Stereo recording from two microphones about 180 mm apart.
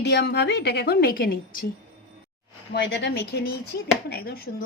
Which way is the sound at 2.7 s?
80° left.